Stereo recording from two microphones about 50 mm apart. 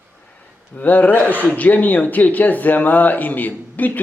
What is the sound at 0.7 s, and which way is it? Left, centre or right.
Speech, left.